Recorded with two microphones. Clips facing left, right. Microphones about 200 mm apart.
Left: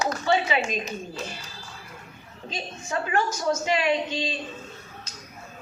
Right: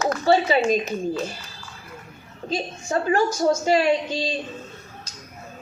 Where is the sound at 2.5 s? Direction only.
35° right (ahead or behind).